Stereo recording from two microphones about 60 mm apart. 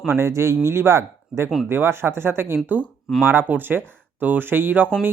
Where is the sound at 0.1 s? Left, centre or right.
Right.